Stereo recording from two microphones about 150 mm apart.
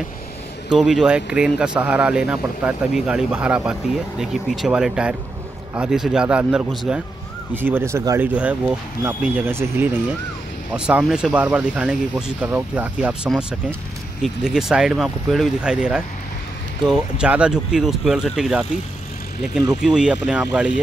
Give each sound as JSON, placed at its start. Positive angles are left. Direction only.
{"t": 0.7, "sound": "speech", "side_deg": -5}
{"t": 7.5, "sound": "speech", "side_deg": -15}
{"t": 8.2, "sound": "speech", "side_deg": -10}
{"t": 19.8, "sound": "speech", "side_deg": -5}